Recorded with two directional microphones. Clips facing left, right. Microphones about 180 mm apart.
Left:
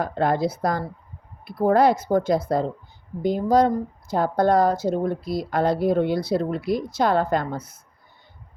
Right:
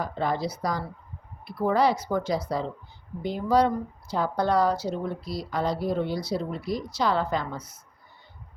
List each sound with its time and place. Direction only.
0.0 s speech: 55° left (ahead or behind)